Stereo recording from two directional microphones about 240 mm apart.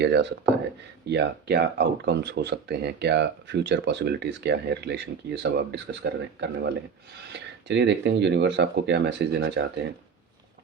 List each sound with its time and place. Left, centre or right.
0.0 s speech: right